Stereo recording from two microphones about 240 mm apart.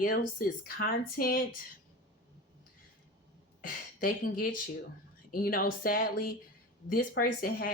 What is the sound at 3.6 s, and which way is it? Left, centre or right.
Speech, left.